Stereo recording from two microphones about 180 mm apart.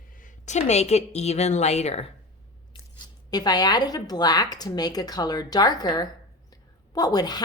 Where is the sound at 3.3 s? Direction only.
20° left (ahead or behind).